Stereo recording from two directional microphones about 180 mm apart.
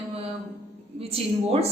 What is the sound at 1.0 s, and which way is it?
Speech, 35° right (ahead or behind).